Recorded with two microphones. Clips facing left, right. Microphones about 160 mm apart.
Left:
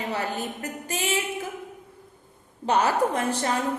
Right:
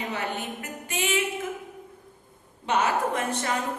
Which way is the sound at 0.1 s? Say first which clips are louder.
Left 2 dB; 35° left (ahead or behind).